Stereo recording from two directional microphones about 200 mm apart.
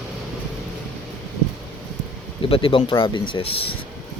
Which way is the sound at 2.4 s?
25° left (ahead or behind).